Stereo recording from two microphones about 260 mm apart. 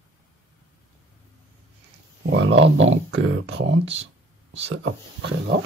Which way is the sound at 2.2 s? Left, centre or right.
Right.